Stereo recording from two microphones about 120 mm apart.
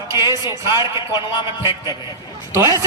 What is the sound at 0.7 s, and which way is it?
Speech, 35° left (ahead or behind).